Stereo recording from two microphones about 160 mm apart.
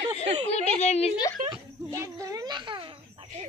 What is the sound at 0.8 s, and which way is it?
Speech, 45° left (ahead or behind).